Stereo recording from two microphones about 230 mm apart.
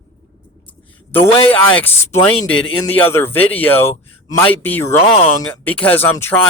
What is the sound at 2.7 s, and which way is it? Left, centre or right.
Speech, left.